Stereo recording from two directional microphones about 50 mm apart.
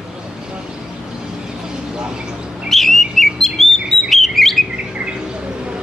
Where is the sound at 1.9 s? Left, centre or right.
Centre.